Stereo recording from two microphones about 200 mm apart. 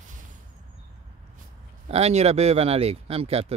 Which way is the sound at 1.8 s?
30° right (ahead or behind).